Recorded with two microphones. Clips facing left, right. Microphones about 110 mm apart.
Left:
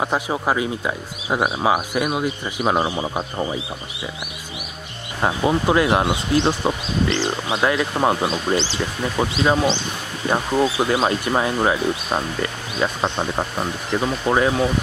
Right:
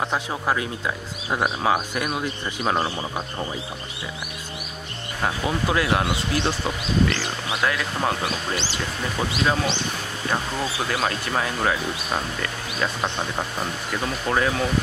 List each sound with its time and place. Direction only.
0.0 s speech: 15° left (ahead or behind)
5.2 s speech: 25° left (ahead or behind)